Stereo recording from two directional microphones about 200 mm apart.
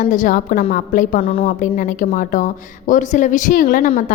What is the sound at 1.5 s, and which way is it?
Speech, 40° left (ahead or behind).